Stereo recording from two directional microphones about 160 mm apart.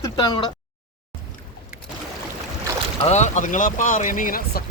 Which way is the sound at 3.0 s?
45° left (ahead or behind).